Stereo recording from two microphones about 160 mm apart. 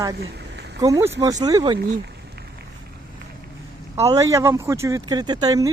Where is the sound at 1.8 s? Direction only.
90° right.